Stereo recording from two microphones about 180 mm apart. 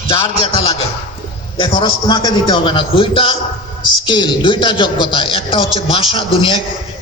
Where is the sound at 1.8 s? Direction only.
25° left (ahead or behind).